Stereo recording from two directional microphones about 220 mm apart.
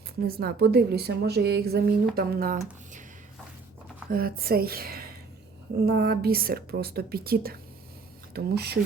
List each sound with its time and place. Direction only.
0.2 s a woman's voice: 45° right (ahead or behind)
4.1 s a woman's voice: 40° right (ahead or behind)